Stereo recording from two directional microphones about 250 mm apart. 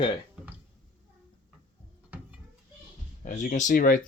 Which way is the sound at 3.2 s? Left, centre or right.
Left.